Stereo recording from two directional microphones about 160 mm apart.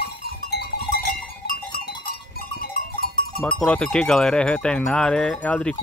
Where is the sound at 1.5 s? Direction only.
65° left (ahead or behind).